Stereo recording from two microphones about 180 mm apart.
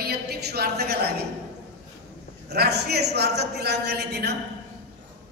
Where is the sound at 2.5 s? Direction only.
65° right (ahead or behind).